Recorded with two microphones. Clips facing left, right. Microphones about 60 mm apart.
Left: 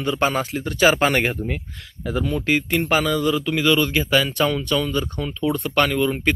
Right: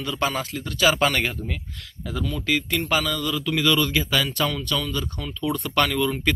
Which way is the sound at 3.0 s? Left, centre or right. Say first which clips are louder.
Left 6 dB; left.